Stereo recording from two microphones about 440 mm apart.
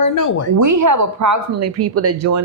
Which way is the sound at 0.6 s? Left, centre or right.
Right.